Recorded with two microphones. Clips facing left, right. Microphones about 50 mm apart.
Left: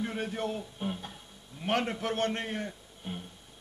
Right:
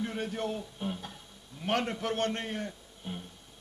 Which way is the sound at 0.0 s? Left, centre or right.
Centre.